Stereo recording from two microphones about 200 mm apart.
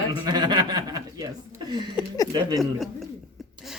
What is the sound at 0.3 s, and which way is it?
Chuckle, 20° right (ahead or behind).